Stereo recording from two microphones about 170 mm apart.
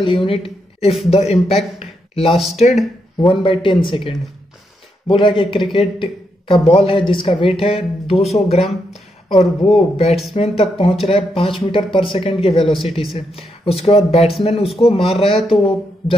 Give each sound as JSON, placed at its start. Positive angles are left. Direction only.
{"t": 0.0, "sound": "a woman's voice", "side_deg": 30}
{"t": 1.8, "sound": "a sound", "side_deg": 35}
{"t": 2.3, "sound": "speech", "side_deg": 0}
{"t": 3.2, "sound": "a man's voice", "side_deg": 30}